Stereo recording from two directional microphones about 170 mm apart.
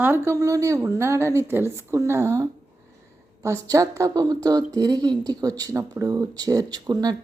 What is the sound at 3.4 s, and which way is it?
Speech, 20° right (ahead or behind).